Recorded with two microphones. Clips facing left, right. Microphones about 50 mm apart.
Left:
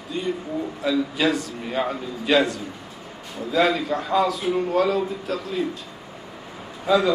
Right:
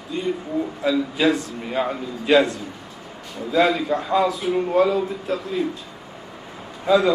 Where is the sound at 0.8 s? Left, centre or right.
Right.